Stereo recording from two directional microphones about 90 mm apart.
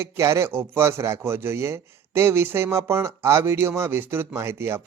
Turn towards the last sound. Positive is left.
turn(degrees=-30)  # may be behind; listen again after turning